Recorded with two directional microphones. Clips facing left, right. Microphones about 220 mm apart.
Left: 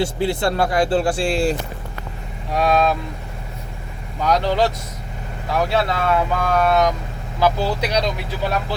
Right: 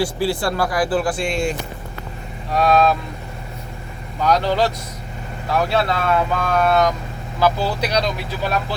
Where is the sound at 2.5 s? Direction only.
20° left (ahead or behind).